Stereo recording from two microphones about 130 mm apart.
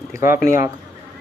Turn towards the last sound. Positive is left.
turn(degrees=90)